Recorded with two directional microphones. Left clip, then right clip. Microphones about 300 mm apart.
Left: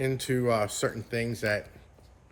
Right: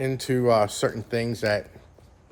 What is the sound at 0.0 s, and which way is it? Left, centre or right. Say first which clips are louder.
Speech: right 4 dB; centre.